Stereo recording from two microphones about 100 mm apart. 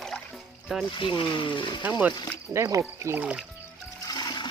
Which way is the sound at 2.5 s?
30° right (ahead or behind).